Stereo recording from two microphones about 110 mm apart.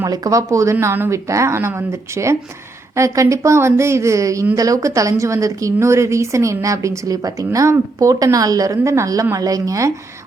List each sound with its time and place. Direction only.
0.0 s a woman's voice: 30° right (ahead or behind)